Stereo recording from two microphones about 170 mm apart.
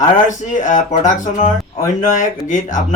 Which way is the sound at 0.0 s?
45° left (ahead or behind).